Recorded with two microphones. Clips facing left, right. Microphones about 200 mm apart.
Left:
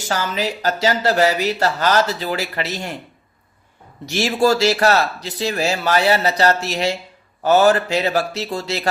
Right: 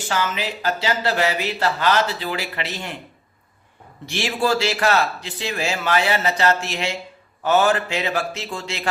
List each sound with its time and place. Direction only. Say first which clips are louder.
0.1 s speech: left 2 dB; 40° left (ahead or behind)
4.0 s speech: left 5 dB; 40° left (ahead or behind)